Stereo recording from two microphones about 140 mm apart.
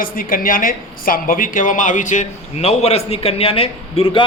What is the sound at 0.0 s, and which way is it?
A woman's voice, 85° left.